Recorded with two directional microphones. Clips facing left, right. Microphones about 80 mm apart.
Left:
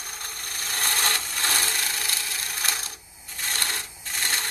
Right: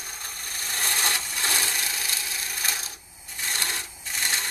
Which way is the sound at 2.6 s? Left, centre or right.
Left.